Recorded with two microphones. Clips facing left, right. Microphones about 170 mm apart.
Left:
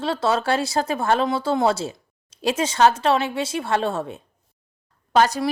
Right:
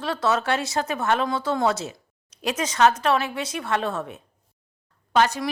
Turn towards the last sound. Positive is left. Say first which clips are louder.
# left 3 dB
turn(degrees=40)  # may be behind; listen again after turning